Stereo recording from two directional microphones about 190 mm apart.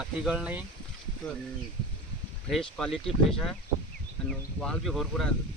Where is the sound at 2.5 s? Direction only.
5° left (ahead or behind).